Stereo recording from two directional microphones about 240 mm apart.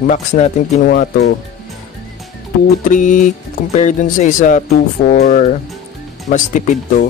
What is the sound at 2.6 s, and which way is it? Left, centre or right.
Speech, left.